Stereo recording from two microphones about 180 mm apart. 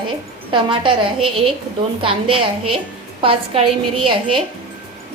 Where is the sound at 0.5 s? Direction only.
25° right (ahead or behind).